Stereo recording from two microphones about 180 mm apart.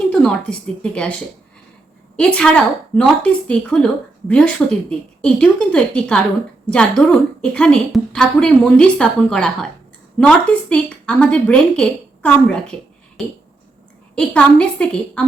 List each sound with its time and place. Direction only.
0.1 s a sound: 5° left (ahead or behind)
0.8 s a woman's voice: 5° left (ahead or behind)
2.1 s a woman's voice: 5° left (ahead or behind)